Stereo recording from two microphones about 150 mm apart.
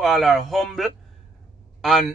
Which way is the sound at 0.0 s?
Centre (ahead or behind).